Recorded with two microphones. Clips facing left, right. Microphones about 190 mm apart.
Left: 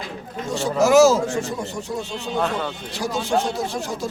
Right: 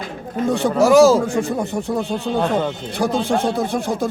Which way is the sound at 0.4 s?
55° right (ahead or behind).